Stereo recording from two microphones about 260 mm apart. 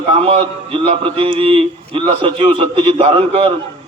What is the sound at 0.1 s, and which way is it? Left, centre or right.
A man's voice, right.